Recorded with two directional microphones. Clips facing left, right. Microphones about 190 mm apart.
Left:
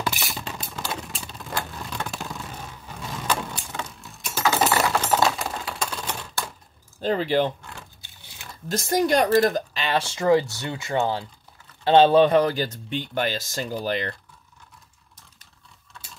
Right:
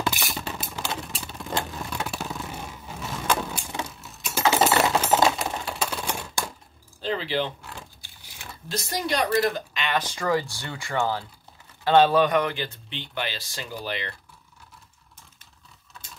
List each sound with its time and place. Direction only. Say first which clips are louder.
0.1 s a sound: right 1 dB; centre (ahead or behind)
4.4 s a sound: right 1 dB; 20° right (ahead or behind)
5.4 s typing: right 1 dB; 5° right (ahead or behind)
7.0 s speech: left 5 dB; 45° left (ahead or behind)
8.6 s speech: left 7 dB; 45° left (ahead or behind)
9.4 s speech: left 3 dB; 40° left (ahead or behind)